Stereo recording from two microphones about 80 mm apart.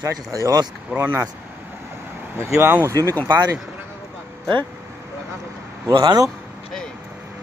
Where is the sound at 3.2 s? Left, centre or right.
Right.